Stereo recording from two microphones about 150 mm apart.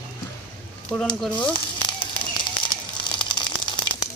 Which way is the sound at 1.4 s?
30° left (ahead or behind).